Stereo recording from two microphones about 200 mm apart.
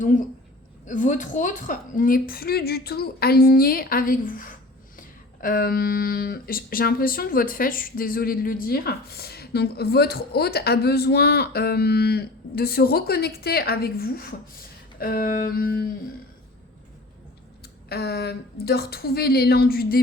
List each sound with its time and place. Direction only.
0.9 s speech: 40° left (ahead or behind)
17.6 s speech: 50° left (ahead or behind)